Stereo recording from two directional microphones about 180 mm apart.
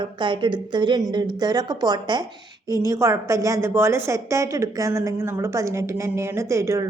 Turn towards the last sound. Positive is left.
turn(degrees=-15)  # may be behind; listen again after turning